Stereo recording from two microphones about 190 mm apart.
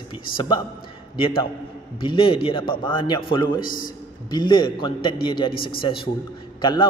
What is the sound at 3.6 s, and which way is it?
Speech, 45° left (ahead or behind).